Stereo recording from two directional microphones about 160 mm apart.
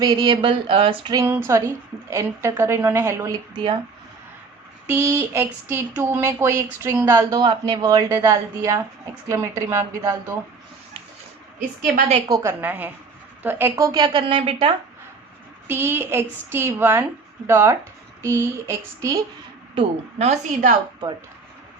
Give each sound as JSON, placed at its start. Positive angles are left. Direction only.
{"t": 0.0, "sound": "speech", "side_deg": -25}
{"t": 1.1, "sound": "a woman's voice", "side_deg": -15}
{"t": 4.9, "sound": "speech", "side_deg": -15}
{"t": 12.3, "sound": "a woman's voice", "side_deg": -15}
{"t": 15.6, "sound": "a woman's voice", "side_deg": -15}
{"t": 19.7, "sound": "a woman's voice", "side_deg": -40}